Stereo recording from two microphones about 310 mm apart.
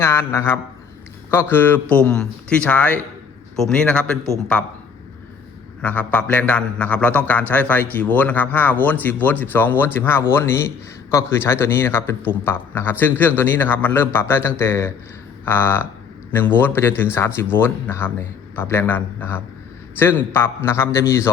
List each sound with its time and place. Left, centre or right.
0.0 s a man's voice: centre
5.8 s a man's voice: centre